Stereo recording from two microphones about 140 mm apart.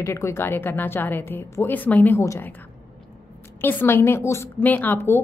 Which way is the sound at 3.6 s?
15° left (ahead or behind).